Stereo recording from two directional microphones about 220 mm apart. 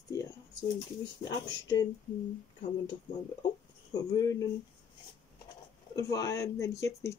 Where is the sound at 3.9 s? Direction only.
15° left (ahead or behind).